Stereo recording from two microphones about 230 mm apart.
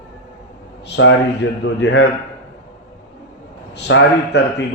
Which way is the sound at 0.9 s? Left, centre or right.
Left.